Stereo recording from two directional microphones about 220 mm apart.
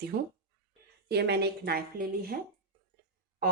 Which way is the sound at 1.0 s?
50° right (ahead or behind).